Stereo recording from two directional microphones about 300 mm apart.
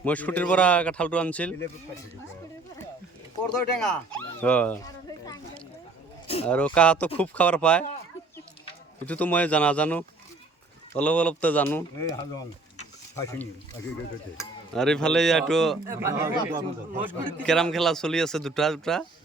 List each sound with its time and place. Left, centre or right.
0.0 s speech: centre
3.4 s speech: centre
5.2 s a sound: centre
6.2 s speech: centre
6.5 s speech: centre
9.0 s speech: centre
17.3 s speech: centre